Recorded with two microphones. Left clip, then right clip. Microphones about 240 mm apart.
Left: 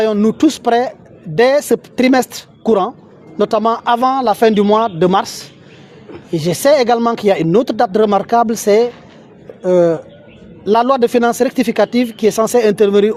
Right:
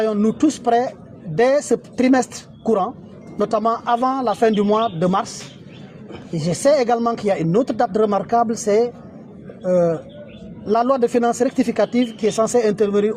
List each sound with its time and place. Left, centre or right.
0.0 s a woman's voice: left
6.4 s speech: left